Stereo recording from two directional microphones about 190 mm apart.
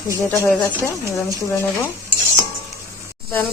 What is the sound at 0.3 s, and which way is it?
Cricket, 10° left (ahead or behind).